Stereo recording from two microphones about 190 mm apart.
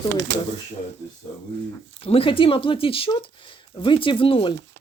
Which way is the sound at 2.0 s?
30° left (ahead or behind).